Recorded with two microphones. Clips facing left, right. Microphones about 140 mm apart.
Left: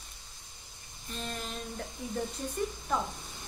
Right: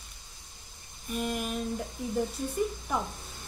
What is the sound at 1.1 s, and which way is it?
Speech, 10° right (ahead or behind).